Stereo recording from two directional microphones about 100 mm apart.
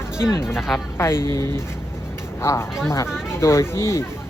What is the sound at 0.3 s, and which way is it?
Speech, 25° left (ahead or behind).